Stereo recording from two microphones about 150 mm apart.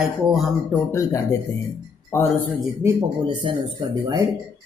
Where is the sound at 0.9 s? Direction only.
20° left (ahead or behind).